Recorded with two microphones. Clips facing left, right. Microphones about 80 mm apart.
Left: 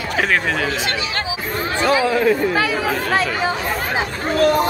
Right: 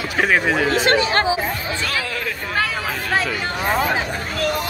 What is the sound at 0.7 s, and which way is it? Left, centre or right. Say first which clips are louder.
Speech: right 6 dB; right.